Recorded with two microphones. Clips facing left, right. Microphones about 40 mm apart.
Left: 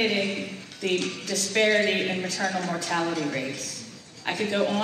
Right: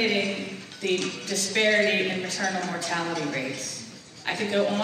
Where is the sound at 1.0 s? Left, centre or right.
Right.